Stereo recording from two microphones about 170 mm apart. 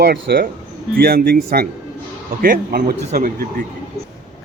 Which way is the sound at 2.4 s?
60° right (ahead or behind).